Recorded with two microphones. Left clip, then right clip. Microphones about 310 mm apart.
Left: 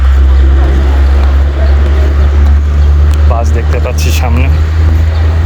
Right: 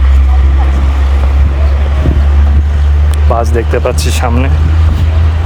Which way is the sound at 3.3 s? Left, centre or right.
Right.